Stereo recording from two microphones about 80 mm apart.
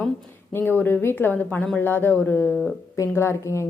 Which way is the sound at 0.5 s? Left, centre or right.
Left.